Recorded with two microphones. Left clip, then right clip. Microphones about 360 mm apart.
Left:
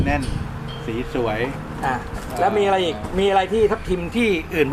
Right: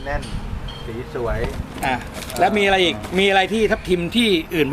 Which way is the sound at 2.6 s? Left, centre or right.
Right.